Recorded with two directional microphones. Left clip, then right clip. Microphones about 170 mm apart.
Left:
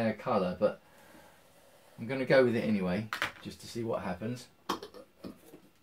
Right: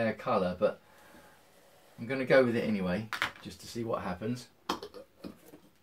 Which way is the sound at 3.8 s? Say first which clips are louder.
Left 1 dB; 15° left (ahead or behind).